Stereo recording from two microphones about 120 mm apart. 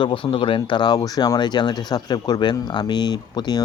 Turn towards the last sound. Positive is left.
turn(degrees=35)  # may be behind; listen again after turning